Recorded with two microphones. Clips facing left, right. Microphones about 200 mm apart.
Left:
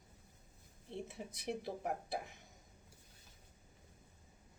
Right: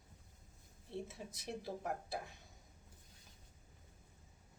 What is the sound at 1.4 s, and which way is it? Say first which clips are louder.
Speech: left 2 dB; 20° left (ahead or behind).